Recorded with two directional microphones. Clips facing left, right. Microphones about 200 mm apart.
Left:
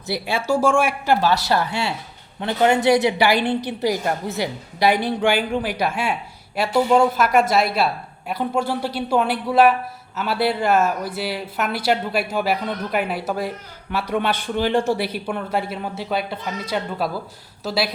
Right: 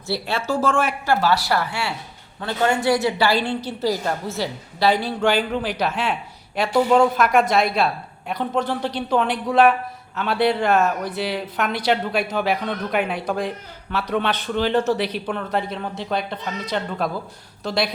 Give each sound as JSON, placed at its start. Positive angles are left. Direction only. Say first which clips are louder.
{"t": 0.1, "sound": "a woman's voice", "louder": "left 2 dB", "side_deg": 15}